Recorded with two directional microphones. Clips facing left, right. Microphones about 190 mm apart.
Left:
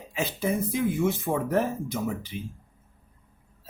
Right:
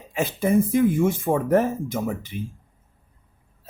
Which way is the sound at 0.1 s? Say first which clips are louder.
Right 6 dB; 50° right (ahead or behind).